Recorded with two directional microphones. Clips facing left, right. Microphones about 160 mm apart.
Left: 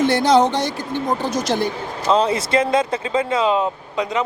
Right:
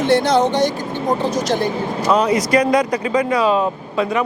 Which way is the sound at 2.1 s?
25° left (ahead or behind).